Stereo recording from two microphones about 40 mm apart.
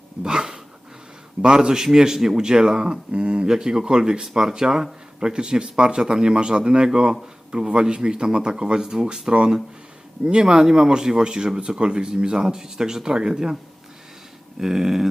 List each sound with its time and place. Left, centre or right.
0.2 s dog: centre
1.4 s speech: right
14.6 s speech: centre